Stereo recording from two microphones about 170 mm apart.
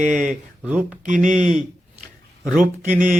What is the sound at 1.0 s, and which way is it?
Speech, 45° right (ahead or behind).